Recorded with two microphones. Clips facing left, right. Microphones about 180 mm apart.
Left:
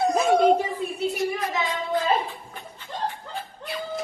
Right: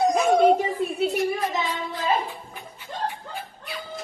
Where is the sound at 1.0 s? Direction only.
60° right (ahead or behind).